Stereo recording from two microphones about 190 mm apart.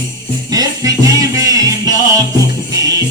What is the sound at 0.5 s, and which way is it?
Music, 20° right (ahead or behind).